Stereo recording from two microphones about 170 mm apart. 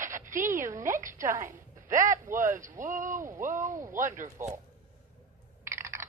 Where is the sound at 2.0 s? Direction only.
50° right (ahead or behind).